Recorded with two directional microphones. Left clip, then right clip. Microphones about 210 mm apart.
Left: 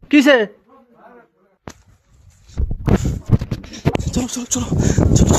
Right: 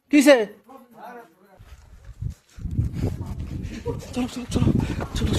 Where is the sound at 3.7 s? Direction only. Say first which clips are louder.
Left 9 dB; 30° left (ahead or behind).